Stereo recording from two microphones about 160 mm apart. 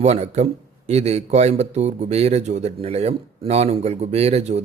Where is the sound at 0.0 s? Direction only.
45° right (ahead or behind).